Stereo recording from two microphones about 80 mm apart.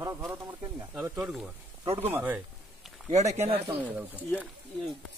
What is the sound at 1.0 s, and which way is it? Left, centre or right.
Speech, centre.